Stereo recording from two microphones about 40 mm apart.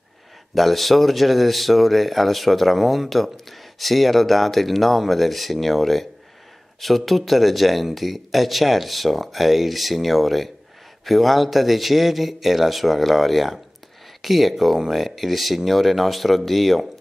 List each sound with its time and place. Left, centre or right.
0.6 s speech: centre